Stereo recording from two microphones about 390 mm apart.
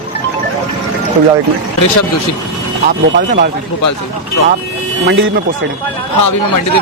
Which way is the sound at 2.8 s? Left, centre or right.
Right.